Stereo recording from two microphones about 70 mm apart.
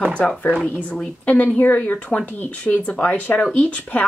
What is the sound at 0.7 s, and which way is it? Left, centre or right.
A woman's voice, centre.